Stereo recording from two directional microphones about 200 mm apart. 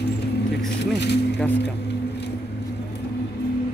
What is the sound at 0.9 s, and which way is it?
Speech, 60° left (ahead or behind).